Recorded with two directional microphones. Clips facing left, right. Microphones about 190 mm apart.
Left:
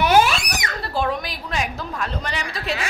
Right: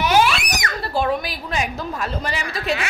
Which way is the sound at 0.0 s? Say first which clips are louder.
Left 1 dB; 50° left (ahead or behind).